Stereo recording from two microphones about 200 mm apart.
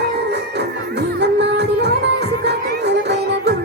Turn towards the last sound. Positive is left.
turn(degrees=-60)  # may be behind; listen again after turning